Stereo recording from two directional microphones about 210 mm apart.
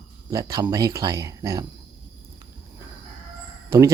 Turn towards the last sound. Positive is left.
turn(degrees=-15)  # may be behind; listen again after turning